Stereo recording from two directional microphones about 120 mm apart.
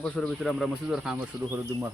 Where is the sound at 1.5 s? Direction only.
20° right (ahead or behind).